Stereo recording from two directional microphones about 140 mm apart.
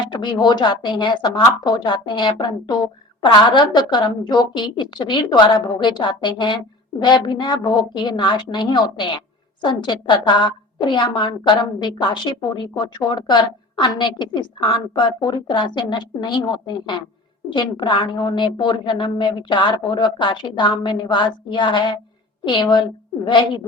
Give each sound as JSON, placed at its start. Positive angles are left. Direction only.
{"t": 0.1, "sound": "a woman's voice", "side_deg": 30}